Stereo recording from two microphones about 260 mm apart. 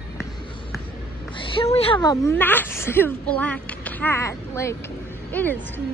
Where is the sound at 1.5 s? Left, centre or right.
Left; by 5.8 s centre.